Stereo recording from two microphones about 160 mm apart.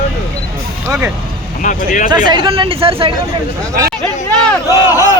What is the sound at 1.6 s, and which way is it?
Speech, 55° left (ahead or behind).